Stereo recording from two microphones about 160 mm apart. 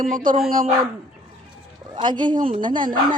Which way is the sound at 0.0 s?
60° right (ahead or behind).